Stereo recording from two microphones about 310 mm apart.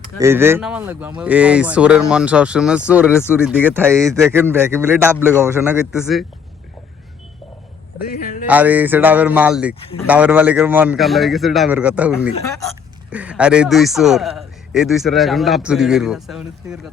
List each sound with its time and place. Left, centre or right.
0.2 s a man's voice: centre
7.9 s a sound: left
8.4 s a man's voice: centre
9.8 s speech: centre
10.1 s a man's voice: centre